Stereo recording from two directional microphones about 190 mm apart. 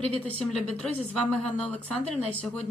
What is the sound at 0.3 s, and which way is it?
A woman's voice, 5° left (ahead or behind).